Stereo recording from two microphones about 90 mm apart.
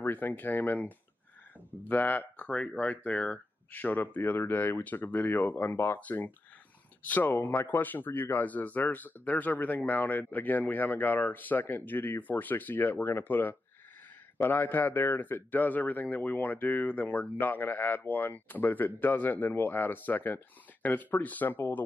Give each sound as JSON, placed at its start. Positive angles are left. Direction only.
{"t": 0.0, "sound": "speech", "side_deg": 20}